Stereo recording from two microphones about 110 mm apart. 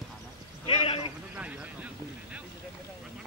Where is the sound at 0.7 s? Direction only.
65° left (ahead or behind).